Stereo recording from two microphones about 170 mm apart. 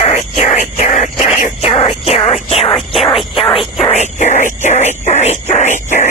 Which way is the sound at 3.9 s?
45° left (ahead or behind).